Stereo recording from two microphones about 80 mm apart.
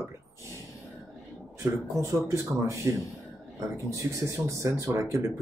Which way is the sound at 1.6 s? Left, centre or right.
Right.